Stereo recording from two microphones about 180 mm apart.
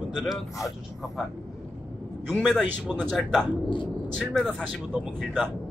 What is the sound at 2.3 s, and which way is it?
Speech, centre (ahead or behind).